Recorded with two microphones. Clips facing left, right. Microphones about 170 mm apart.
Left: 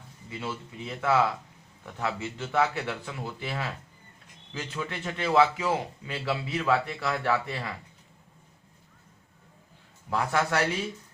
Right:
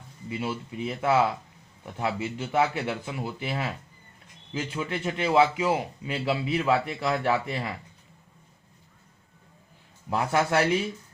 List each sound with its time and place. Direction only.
0.3 s a man's voice: 15° right (ahead or behind)
10.1 s a man's voice: 20° right (ahead or behind)